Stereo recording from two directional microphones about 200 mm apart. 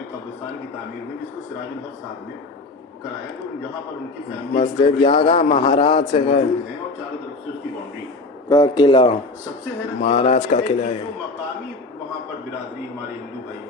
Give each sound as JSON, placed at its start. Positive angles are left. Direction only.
{"t": 4.5, "sound": "speech", "side_deg": 25}
{"t": 8.4, "sound": "speech", "side_deg": 20}